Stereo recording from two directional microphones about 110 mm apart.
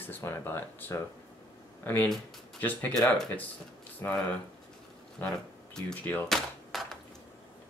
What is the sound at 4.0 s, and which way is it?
Speech, 15° left (ahead or behind).